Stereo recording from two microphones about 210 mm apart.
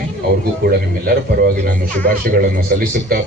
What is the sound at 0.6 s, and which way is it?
Speech, 50° right (ahead or behind).